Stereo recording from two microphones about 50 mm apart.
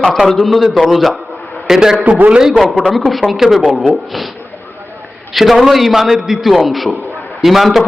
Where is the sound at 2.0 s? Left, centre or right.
Right.